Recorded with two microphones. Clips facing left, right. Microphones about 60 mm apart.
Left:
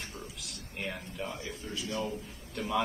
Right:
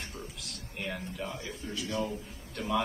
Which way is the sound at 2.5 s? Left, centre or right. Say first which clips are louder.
Right 1 dB; centre.